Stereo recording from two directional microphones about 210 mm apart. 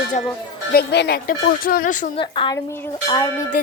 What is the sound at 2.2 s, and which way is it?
Dishes, 20° left (ahead or behind).